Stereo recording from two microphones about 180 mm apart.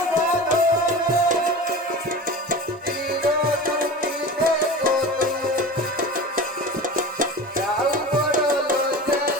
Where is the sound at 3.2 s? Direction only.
55° right (ahead or behind).